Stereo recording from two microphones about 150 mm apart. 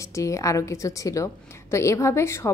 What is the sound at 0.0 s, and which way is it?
A woman's voice, 20° left (ahead or behind).